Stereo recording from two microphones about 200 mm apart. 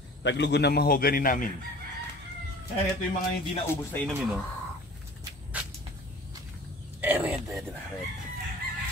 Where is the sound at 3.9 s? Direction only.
Centre (ahead or behind).